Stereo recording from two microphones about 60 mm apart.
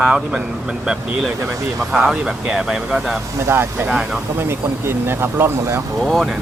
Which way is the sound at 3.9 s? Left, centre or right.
Centre.